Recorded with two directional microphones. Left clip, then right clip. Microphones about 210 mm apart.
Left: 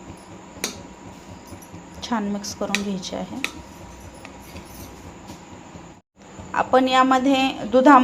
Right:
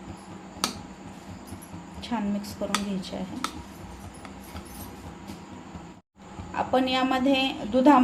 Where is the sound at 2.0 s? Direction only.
15° left (ahead or behind).